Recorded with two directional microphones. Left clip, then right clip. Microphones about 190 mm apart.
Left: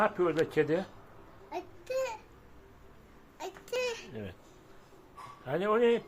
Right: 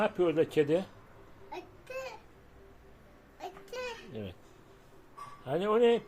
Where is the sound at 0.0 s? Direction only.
15° right (ahead or behind).